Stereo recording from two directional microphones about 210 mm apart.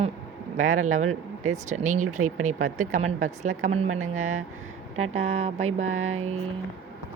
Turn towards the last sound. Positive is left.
turn(degrees=-30)  # may be behind; listen again after turning